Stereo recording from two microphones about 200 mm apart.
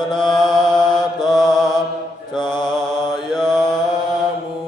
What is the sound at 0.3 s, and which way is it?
Mantra, centre (ahead or behind).